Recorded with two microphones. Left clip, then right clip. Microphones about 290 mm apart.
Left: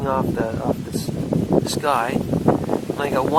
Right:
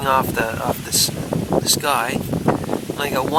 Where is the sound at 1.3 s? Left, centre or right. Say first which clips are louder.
Left 5 dB; right.